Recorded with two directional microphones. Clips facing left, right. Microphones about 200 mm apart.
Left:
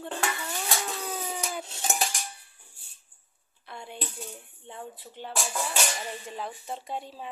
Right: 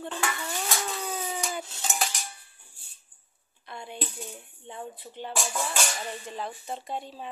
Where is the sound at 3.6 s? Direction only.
Centre (ahead or behind).